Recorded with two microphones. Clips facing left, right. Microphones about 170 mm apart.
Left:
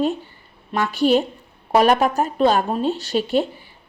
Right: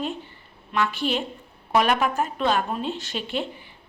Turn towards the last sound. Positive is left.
turn(degrees=40)  # may be behind; listen again after turning